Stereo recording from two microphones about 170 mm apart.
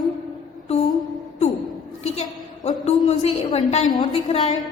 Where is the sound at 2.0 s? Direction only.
40° left (ahead or behind).